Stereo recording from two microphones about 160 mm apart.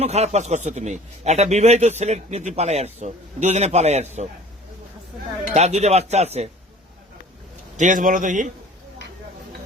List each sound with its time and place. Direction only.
0.0 s a man's voice: 40° right (ahead or behind)
5.5 s a man's voice: 45° right (ahead or behind)
7.8 s a man's voice: 55° right (ahead or behind)